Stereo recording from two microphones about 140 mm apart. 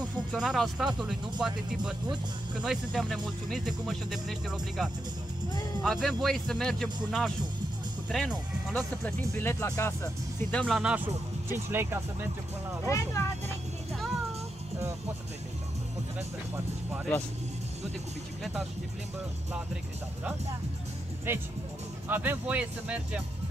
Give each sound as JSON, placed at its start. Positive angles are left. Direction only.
{"t": 0.3, "sound": "speech", "side_deg": 0}
{"t": 9.4, "sound": "speech", "side_deg": 20}
{"t": 10.5, "sound": "speech", "side_deg": 5}
{"t": 11.5, "sound": "speech", "side_deg": -20}
{"t": 12.8, "sound": "speech", "side_deg": 20}
{"t": 21.3, "sound": "speech", "side_deg": -15}